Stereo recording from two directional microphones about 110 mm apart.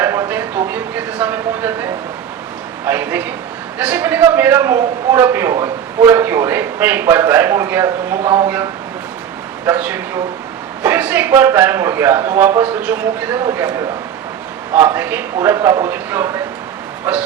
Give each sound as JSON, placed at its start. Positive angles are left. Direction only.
{"t": 0.0, "sound": "a sound", "side_deg": -20}
{"t": 2.8, "sound": "a man's voice", "side_deg": -20}
{"t": 9.6, "sound": "a man's voice", "side_deg": -15}